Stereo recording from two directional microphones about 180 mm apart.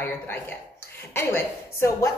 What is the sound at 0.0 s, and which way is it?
A woman's voice, 10° left (ahead or behind).